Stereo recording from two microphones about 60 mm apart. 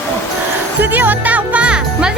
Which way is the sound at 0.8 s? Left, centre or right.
Right.